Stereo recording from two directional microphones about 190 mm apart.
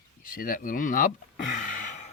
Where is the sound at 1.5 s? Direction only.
40° left (ahead or behind).